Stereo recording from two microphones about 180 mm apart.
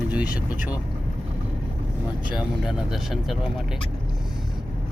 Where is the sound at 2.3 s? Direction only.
5° right (ahead or behind).